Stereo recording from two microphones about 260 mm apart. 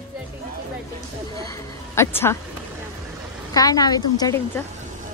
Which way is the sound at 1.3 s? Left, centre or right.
Centre.